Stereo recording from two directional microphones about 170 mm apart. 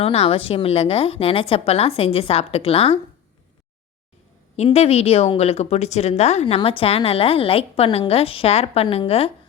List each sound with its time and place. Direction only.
0.0 s speech: 35° left (ahead or behind)
4.5 s speech: 40° left (ahead or behind)